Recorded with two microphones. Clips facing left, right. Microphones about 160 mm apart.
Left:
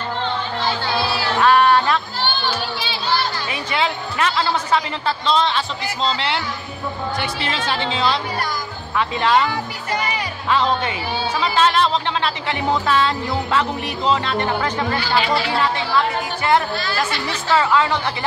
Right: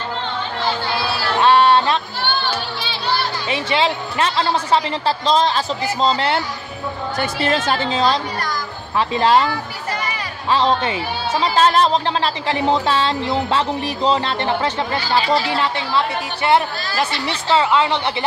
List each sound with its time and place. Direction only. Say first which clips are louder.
1.4 s music: right 1 dB; 30° right (ahead or behind)
3.4 s music: right 3 dB; 25° right (ahead or behind); by 6.4 s 45° right (ahead or behind)
7.2 s a woman's voice: right 5 dB; 45° right (ahead or behind)
8.9 s music: right 3 dB; 35° right (ahead or behind)
10.5 s music: right 2 dB; 30° right (ahead or behind)
17.5 s speech: right 1 dB; 20° right (ahead or behind)